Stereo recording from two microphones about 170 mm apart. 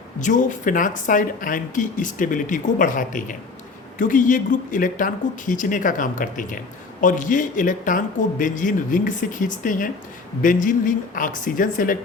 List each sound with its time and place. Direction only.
0.2 s speech: 50° left (ahead or behind)